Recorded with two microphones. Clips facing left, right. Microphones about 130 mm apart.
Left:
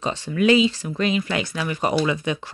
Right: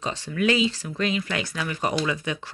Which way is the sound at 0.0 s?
20° left (ahead or behind).